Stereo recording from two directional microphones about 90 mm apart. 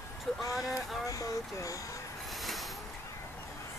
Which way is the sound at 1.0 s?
40° left (ahead or behind).